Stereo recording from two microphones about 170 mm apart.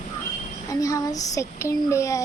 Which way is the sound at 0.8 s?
20° left (ahead or behind).